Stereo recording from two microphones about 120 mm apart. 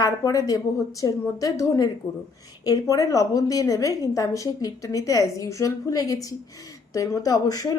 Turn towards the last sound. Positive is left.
turn(degrees=30)  # may be behind; listen again after turning